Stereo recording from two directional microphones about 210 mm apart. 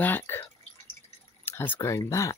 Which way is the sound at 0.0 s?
10° left (ahead or behind).